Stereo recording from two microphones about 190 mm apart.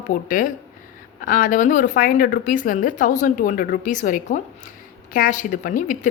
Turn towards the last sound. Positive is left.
turn(degrees=45)  # may be behind; listen again after turning